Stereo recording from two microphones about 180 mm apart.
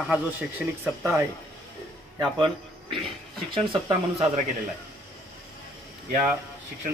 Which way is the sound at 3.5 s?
30° right (ahead or behind).